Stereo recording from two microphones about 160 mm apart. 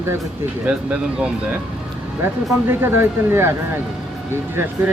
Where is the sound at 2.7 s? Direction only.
15° right (ahead or behind).